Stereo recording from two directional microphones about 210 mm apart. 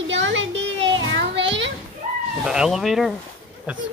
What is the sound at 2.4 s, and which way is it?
Speech, centre (ahead or behind).